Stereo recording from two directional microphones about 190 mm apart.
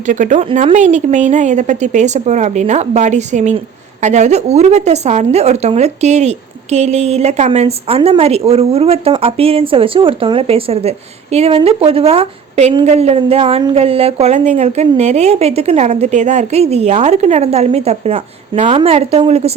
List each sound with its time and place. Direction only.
0.0 s a woman's voice: 40° right (ahead or behind)